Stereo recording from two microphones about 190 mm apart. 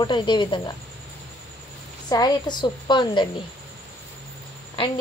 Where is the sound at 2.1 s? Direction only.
20° left (ahead or behind).